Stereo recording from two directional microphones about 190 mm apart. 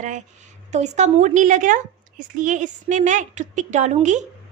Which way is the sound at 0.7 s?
35° right (ahead or behind).